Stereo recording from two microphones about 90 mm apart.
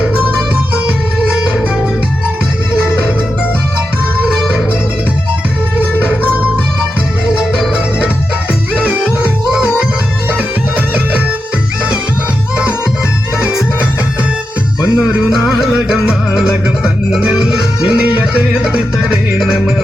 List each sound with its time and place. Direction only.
0.9 s music: 10° right (ahead or behind)
7.3 s music: 10° right (ahead or behind)
14.9 s music: 10° right (ahead or behind)